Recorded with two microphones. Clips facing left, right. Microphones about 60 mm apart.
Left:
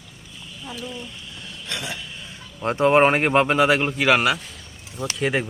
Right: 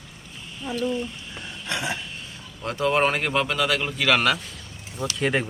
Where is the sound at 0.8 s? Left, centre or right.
Right.